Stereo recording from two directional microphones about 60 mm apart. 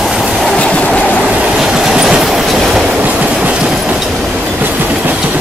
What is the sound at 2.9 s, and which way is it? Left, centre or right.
Train, right.